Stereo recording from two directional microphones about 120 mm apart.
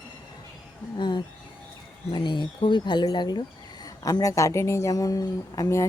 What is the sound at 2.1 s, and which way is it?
Speech, 40° left (ahead or behind).